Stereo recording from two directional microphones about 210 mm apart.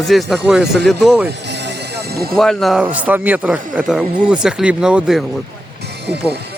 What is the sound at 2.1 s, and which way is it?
Speech, 45° right (ahead or behind).